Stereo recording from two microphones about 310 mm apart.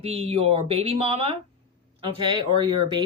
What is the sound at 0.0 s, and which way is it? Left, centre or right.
Speech, centre.